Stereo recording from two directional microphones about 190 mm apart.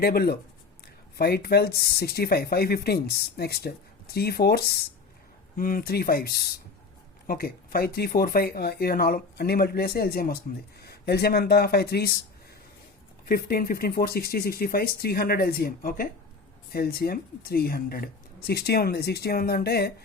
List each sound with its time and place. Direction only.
0.0 s speech: 55° left (ahead or behind)
13.2 s speech: 50° left (ahead or behind)